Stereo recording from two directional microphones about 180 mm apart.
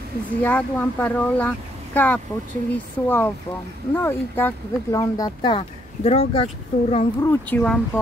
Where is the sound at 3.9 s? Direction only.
10° left (ahead or behind); by 7.1 s 30° left (ahead or behind).